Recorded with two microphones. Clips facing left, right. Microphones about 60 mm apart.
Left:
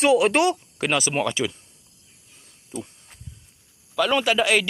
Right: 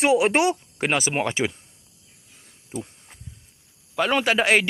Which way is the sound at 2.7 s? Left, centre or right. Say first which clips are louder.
Right 1 dB; right.